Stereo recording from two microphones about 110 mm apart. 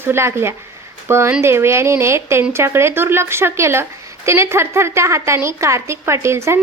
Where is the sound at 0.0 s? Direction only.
20° right (ahead or behind).